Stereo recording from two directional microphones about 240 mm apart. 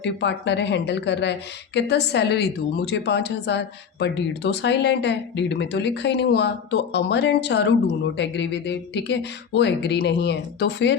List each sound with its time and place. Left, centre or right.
0.0 s a woman's voice: left